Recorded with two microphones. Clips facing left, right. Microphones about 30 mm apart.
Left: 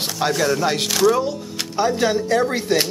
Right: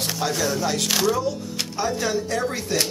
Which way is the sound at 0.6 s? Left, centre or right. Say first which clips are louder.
Left 4 dB; left.